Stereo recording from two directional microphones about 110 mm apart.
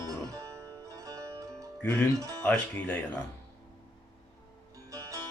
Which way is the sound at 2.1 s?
30° right (ahead or behind).